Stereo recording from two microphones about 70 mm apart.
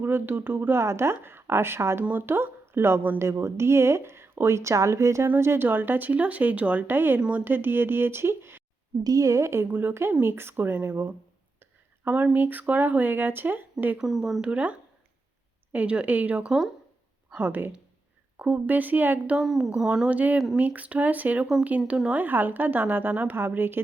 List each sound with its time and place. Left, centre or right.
0.0 s speech: right
5.3 s speech: right
9.0 s a woman's voice: right
9.6 s speech: right
14.0 s speech: centre
14.4 s speech: centre
19.4 s a woman's voice: centre
20.1 s speech: right